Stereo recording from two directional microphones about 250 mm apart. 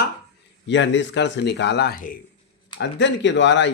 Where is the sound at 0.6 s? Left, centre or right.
Left.